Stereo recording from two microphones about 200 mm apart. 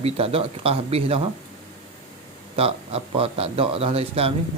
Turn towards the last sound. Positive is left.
turn(degrees=-30)  # may be behind; listen again after turning